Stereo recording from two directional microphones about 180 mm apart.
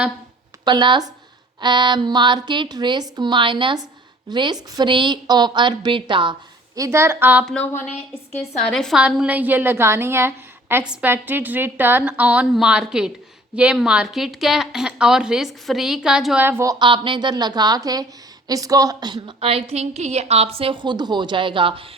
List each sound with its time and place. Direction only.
0.6 s a woman's voice: 25° right (ahead or behind)
6.7 s a woman's voice: 15° right (ahead or behind)
7.4 s a woman's voice: 10° left (ahead or behind); by 21.8 s 30° right (ahead or behind)